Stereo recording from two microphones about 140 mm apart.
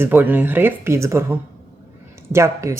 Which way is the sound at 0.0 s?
15° right (ahead or behind).